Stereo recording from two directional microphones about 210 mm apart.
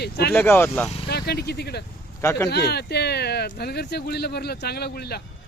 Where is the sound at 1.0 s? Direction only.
50° left (ahead or behind).